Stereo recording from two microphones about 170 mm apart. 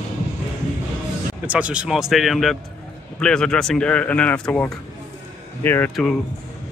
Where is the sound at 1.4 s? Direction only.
5° right (ahead or behind); by 5.9 s 10° left (ahead or behind).